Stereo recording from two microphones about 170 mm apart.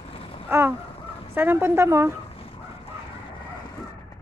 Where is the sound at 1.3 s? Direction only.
15° right (ahead or behind).